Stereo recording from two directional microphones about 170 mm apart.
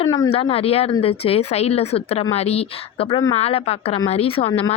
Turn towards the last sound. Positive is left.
turn(degrees=35)  # may be behind; listen again after turning